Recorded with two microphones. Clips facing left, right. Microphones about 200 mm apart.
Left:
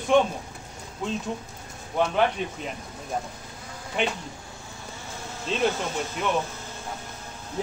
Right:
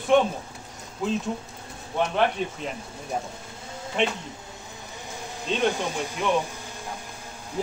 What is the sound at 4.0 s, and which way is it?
Speech, 5° left (ahead or behind).